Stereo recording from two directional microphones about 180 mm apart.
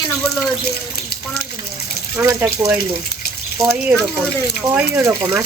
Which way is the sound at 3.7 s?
5° right (ahead or behind).